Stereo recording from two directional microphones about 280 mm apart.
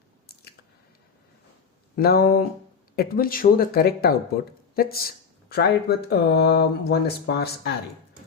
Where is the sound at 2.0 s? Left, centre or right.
Left.